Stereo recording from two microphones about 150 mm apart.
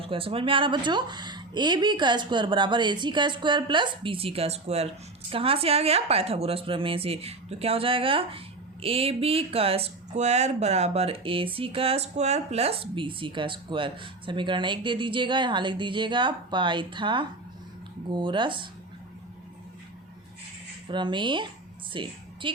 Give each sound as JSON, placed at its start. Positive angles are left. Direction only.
{"t": 0.0, "sound": "speech", "side_deg": -35}
{"t": 20.8, "sound": "a woman's voice", "side_deg": -30}